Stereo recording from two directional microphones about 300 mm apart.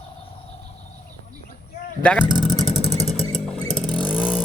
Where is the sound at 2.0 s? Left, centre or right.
Centre.